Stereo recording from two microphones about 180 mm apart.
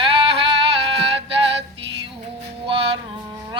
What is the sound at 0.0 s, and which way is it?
Female singing, 30° right (ahead or behind).